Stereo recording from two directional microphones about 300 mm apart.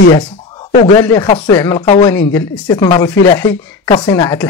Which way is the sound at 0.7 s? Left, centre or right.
Centre.